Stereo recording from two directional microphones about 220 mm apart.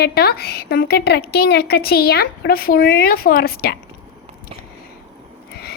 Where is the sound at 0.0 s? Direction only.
45° left (ahead or behind).